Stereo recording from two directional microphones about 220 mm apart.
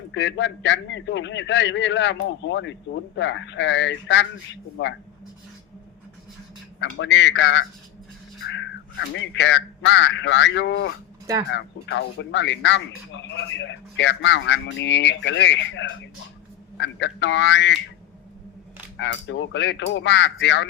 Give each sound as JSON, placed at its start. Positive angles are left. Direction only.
{"t": 0.1, "sound": "a man's voice", "side_deg": 55}
{"t": 6.7, "sound": "a man's voice", "side_deg": 55}
{"t": 18.9, "sound": "a man's voice", "side_deg": 55}